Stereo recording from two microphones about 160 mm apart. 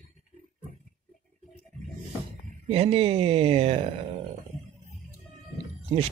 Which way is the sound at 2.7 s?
40° right (ahead or behind).